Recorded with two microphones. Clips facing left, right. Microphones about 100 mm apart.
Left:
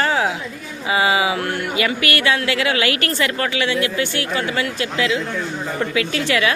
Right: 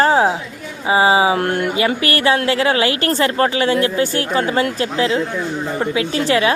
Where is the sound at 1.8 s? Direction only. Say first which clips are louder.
Right 3 dB; 35° right (ahead or behind).